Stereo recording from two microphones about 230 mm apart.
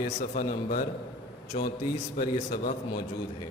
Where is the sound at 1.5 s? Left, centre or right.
Left.